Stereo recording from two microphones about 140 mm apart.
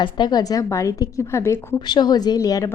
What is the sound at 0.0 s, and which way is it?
A woman's voice, 30° left (ahead or behind).